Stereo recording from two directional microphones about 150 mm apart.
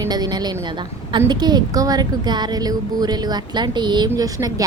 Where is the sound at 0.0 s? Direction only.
25° right (ahead or behind).